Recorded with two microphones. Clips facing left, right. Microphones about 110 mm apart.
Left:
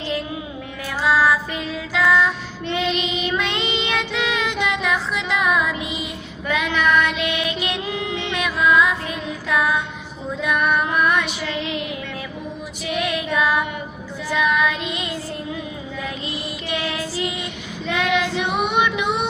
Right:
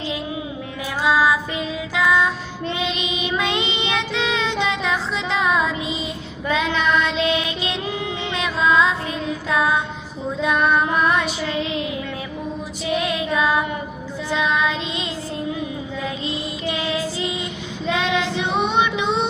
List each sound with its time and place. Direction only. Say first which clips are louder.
1.0 s music: even; 15° right (ahead or behind)
2.7 s child singing: left 5 dB; 20° right (ahead or behind)
12.9 s child singing: right 1 dB; 25° right (ahead or behind)
16.0 s child singing: right 3 dB; 25° right (ahead or behind)